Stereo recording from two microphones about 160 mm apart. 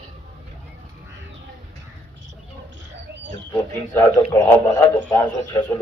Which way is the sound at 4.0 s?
20° left (ahead or behind).